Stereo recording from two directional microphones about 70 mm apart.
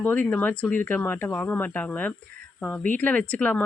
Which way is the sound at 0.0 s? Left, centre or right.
Left.